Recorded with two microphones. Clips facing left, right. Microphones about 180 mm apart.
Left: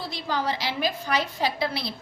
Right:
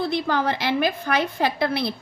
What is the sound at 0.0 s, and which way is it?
A woman's voice, 55° right (ahead or behind).